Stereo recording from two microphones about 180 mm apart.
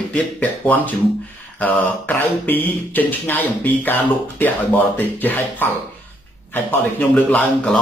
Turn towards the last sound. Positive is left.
turn(degrees=5)  # may be behind; listen again after turning